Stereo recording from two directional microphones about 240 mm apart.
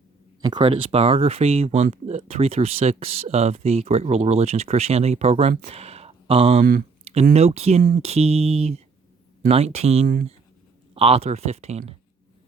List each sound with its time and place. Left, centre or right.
0.4 s speech: centre
6.6 s speech: right
7.0 s speech: right